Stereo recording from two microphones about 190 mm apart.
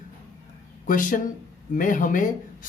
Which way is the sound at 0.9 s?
45° left (ahead or behind).